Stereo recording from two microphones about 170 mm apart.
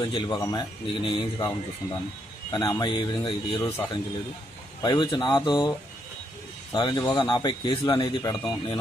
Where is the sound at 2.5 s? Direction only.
25° left (ahead or behind).